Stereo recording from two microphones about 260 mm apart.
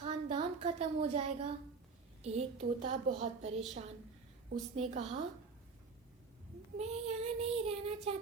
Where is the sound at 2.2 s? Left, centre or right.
Right.